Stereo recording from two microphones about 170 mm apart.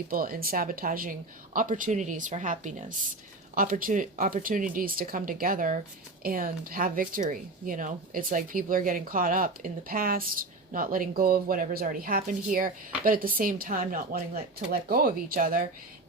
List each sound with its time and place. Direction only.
0.1 s speech: 60° right (ahead or behind)